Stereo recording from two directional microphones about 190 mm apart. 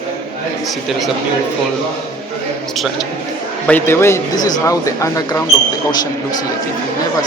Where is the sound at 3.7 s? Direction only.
10° left (ahead or behind).